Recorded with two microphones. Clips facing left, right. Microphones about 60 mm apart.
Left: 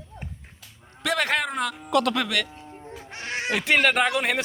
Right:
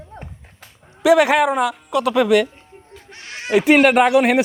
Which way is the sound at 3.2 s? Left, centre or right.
Left.